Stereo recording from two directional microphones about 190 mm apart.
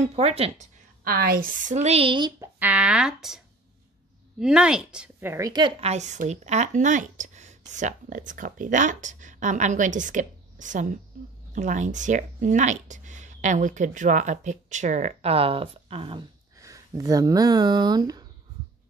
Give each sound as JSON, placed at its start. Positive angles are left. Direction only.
{"t": 0.1, "sound": "speech", "side_deg": -30}
{"t": 1.0, "sound": "speech", "side_deg": -55}
{"t": 2.6, "sound": "a woman's voice", "side_deg": -5}
{"t": 5.8, "sound": "speech", "side_deg": -35}
{"t": 16.5, "sound": "speech", "side_deg": -15}